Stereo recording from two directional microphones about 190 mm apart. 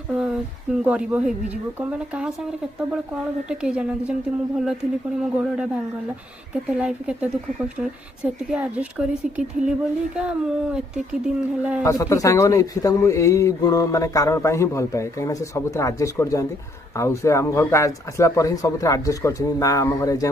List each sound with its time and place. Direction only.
0.1 s speech: 5° right (ahead or behind)
3.4 s speech: 5° right (ahead or behind)
6.5 s speech: 5° right (ahead or behind)
11.8 s a man's voice: 15° left (ahead or behind)